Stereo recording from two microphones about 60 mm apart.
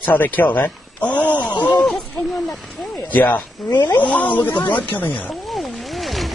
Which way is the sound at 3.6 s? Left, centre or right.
Centre.